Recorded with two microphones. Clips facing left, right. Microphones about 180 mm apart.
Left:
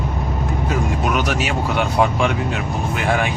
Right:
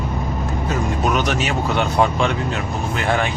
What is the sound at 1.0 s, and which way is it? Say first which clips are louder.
Speech: right 1 dB; 10° left (ahead or behind).